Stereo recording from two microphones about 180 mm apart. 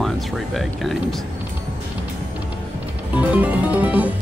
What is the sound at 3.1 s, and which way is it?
Music, 10° right (ahead or behind).